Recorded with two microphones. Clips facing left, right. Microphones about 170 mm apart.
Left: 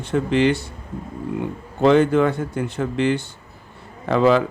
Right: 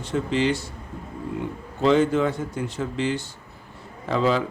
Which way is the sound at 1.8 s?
60° left (ahead or behind).